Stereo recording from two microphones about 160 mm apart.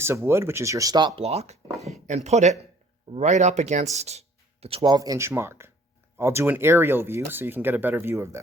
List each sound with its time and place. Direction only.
0.0 s speech: 15° right (ahead or behind)